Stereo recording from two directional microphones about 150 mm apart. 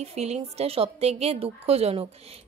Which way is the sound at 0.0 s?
45° right (ahead or behind).